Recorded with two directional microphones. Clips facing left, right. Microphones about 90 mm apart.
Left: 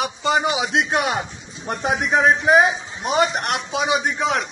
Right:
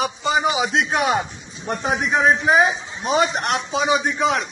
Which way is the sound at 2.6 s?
35° right (ahead or behind).